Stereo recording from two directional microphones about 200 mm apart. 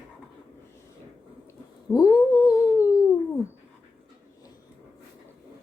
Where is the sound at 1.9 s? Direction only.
15° left (ahead or behind).